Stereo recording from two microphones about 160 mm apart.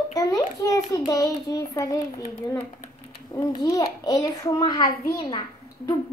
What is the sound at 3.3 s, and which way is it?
A child's voice, 25° left (ahead or behind).